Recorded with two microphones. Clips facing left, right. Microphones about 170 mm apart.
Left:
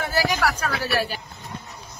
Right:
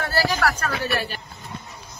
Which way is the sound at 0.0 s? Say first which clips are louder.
Even; 15° left (ahead or behind).